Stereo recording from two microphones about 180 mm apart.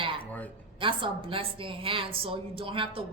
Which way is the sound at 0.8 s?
30° right (ahead or behind).